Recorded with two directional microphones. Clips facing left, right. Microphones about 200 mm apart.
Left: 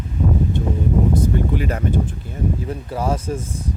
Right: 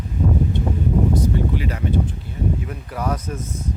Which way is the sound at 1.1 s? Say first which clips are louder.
Left 1 dB; 50° left (ahead or behind).